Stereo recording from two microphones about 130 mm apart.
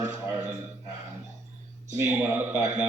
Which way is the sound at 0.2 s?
20° right (ahead or behind).